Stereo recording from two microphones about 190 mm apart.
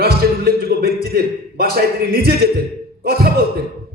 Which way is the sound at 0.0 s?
55° right (ahead or behind).